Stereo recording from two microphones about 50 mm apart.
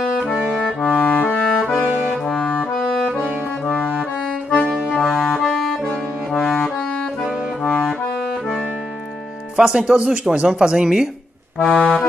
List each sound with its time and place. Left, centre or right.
0.5 s music: centre
0.8 s music: left
2.2 s clarinet: centre
3.6 s accordion: left
5.0 s accordion: centre
5.5 s music: centre
7.6 s accordion: centre
9.6 s speech: centre
11.5 s accordion: centre